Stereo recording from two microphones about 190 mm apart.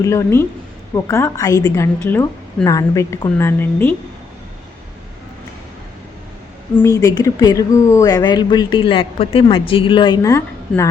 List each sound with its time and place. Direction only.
0.0 s a woman's voice: 15° left (ahead or behind)
6.7 s speech: 15° left (ahead or behind)